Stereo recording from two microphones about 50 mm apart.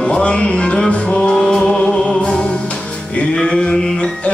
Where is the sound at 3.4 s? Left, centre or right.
Centre.